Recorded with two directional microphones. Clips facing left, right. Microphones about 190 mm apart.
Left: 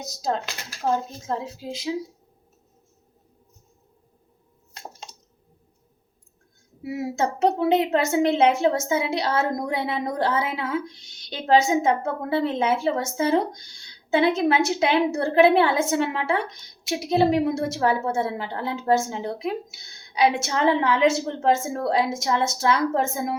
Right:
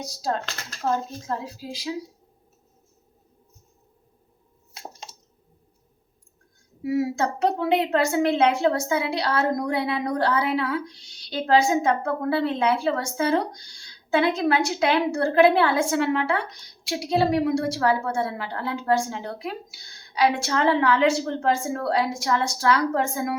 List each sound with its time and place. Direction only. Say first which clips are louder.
0.0 s a woman's voice: left 1 dB; 20° left (ahead or behind)
1.5 s a woman's voice: left 2 dB; 25° left (ahead or behind)
4.7 s a sound: even; 5° right (ahead or behind)
6.9 s a woman's voice: right 2 dB; 20° left (ahead or behind)